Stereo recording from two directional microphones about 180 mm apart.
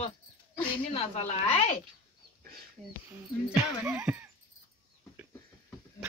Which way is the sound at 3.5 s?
10° right (ahead or behind).